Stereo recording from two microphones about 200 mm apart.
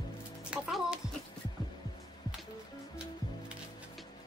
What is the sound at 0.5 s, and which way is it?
Music, 5° right (ahead or behind).